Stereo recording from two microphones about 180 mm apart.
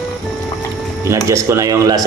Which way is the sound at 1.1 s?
15° right (ahead or behind).